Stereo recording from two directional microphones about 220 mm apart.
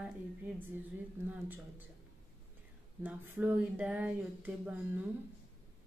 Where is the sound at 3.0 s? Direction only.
10° right (ahead or behind).